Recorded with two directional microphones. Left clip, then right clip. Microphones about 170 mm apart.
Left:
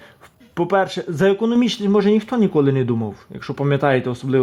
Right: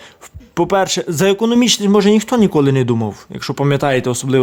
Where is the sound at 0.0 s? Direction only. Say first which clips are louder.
Right 6 dB; 20° right (ahead or behind).